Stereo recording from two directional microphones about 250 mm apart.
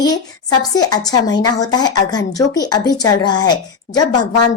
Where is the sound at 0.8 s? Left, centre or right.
Centre.